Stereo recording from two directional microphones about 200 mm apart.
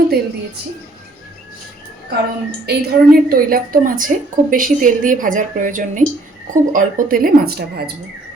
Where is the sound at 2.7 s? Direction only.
55° right (ahead or behind).